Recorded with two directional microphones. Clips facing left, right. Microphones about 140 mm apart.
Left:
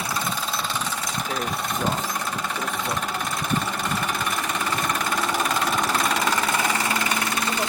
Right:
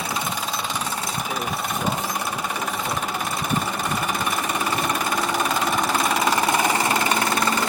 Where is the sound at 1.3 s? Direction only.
5° right (ahead or behind).